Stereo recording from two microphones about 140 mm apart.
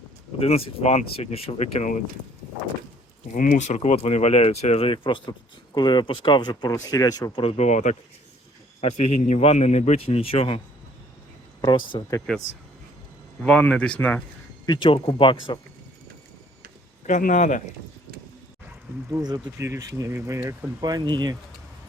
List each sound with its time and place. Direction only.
0.3 s speech: 45° left (ahead or behind)
3.3 s speech: 75° left (ahead or behind); by 7.4 s 30° left (ahead or behind)
7.4 s speech: 50° left (ahead or behind)
11.6 s speech: 35° left (ahead or behind)
13.4 s speech: 10° left (ahead or behind)
14.7 s speech: 35° left (ahead or behind)
17.1 s a man's voice: 65° left (ahead or behind)
19.5 s speech: 20° right (ahead or behind)
20.8 s speech: 30° right (ahead or behind)